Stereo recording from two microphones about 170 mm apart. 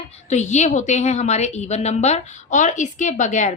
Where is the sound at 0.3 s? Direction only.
45° left (ahead or behind).